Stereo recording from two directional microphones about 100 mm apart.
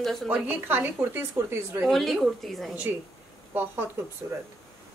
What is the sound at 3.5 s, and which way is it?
Speech, 20° right (ahead or behind).